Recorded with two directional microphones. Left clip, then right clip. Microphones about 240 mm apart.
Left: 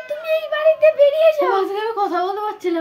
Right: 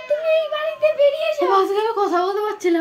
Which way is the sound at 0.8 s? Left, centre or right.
Left.